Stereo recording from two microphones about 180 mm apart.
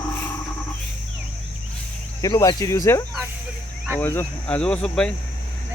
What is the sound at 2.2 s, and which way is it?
Speech, 20° left (ahead or behind).